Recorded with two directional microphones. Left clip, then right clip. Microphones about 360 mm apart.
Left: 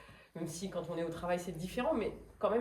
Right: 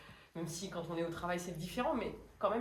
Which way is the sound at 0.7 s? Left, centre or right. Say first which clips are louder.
Left 1 dB; centre.